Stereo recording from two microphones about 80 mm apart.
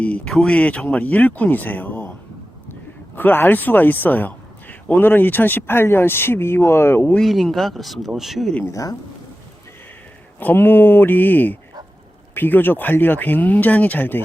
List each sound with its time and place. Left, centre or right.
0.0 s speech: centre
3.2 s speech: left
7.2 s speech: centre
8.7 s speech: left
10.4 s speech: left